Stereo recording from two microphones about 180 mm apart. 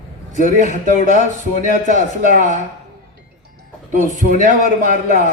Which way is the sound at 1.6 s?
45° right (ahead or behind).